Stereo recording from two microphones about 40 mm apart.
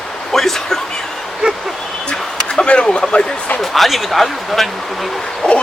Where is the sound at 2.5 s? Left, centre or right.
Left.